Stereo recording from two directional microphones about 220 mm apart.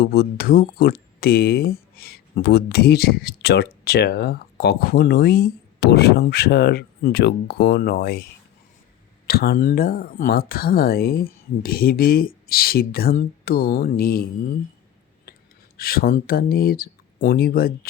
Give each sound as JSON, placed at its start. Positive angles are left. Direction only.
{"t": 0.0, "sound": "speech", "side_deg": 45}
{"t": 9.2, "sound": "speech", "side_deg": 45}
{"t": 15.8, "sound": "speech", "side_deg": 40}